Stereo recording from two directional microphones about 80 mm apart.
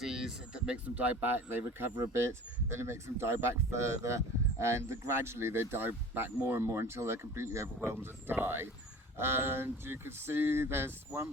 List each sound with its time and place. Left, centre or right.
0.0 s speech: centre; by 10.9 s right